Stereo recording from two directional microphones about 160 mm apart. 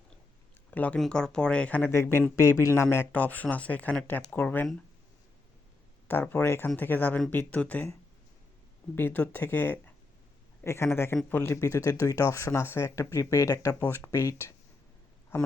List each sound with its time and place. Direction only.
0.7 s speech: 10° left (ahead or behind)
6.1 s speech: 15° left (ahead or behind)
9.0 s speech: 10° left (ahead or behind)